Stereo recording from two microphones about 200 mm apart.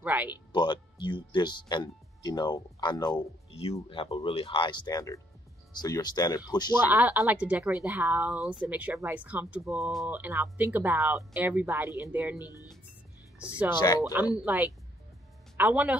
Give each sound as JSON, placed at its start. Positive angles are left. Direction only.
{"t": 0.0, "sound": "a sound", "side_deg": -10}
{"t": 0.5, "sound": "speech", "side_deg": 25}
{"t": 6.9, "sound": "a woman's voice", "side_deg": -10}
{"t": 13.7, "sound": "speech", "side_deg": 20}
{"t": 14.1, "sound": "a woman's voice", "side_deg": -10}